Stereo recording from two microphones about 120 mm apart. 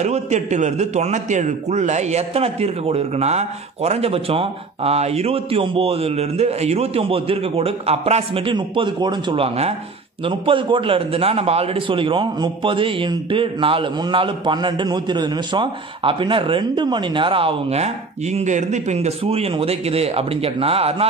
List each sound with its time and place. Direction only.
0.0 s a man's voice: 70° right (ahead or behind); by 20.9 s 55° right (ahead or behind)